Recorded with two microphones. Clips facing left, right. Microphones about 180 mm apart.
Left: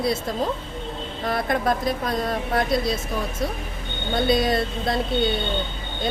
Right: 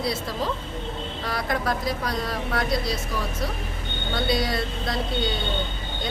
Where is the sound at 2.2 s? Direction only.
25° left (ahead or behind).